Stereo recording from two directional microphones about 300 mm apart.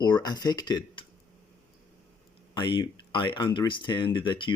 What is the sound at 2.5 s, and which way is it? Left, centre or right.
Speech, centre.